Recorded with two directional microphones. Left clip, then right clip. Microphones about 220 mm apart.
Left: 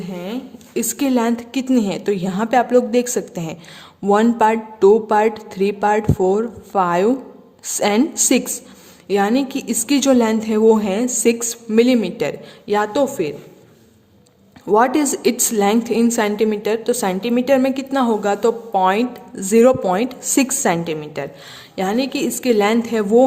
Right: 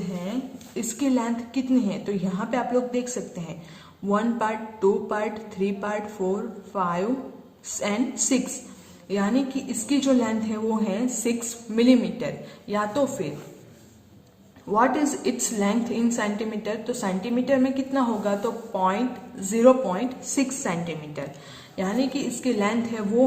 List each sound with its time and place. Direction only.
0.1 s a woman's voice: 50° left (ahead or behind)
14.7 s a woman's voice: 50° left (ahead or behind)